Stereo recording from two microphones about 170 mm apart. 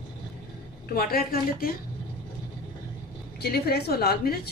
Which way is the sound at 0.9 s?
60° left (ahead or behind).